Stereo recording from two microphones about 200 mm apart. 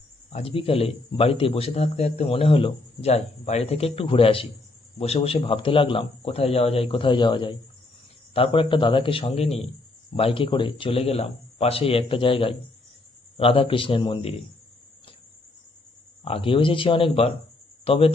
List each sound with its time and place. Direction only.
0.3 s speech: 30° left (ahead or behind)
16.2 s speech: 25° left (ahead or behind)